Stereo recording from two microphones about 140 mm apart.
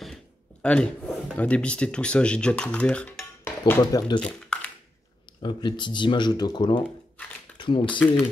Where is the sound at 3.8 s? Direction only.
30° left (ahead or behind).